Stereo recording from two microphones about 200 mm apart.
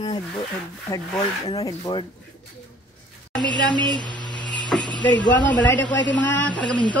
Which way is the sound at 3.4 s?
20° right (ahead or behind).